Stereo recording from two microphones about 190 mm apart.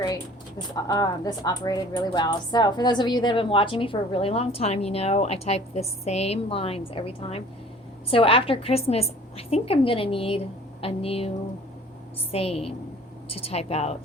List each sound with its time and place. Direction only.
0.7 s a woman's voice: 20° left (ahead or behind)
12.3 s a woman's voice: 30° left (ahead or behind)